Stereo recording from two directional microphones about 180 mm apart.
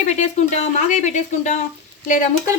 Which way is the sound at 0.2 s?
40° left (ahead or behind).